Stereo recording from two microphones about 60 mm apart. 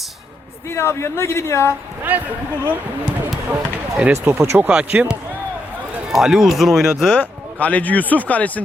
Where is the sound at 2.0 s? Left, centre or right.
Right.